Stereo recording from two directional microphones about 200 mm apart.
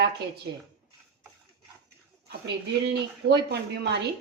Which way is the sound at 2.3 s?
55° right (ahead or behind).